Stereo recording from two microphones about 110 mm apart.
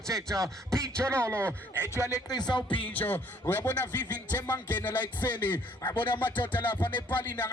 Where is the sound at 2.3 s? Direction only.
40° left (ahead or behind).